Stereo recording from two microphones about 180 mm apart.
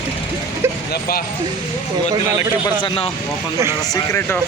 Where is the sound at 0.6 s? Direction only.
15° right (ahead or behind).